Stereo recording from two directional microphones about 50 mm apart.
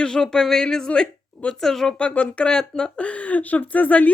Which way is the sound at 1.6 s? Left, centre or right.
Centre.